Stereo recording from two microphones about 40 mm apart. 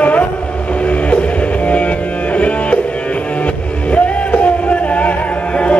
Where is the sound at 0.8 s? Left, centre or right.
Left.